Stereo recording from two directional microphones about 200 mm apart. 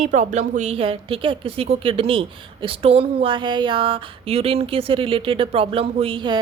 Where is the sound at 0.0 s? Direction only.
35° right (ahead or behind).